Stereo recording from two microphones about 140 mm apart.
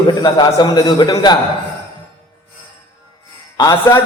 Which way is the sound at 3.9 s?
20° left (ahead or behind).